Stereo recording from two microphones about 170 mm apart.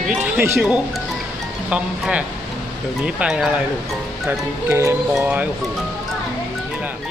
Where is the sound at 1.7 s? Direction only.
5° right (ahead or behind).